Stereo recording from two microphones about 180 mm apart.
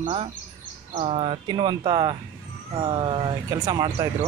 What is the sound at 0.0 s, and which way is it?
Speech, 30° right (ahead or behind).